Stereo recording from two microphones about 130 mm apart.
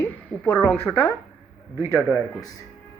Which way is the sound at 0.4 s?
15° left (ahead or behind).